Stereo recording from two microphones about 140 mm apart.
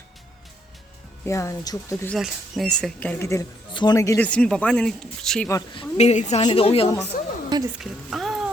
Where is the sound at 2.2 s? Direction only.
Centre (ahead or behind).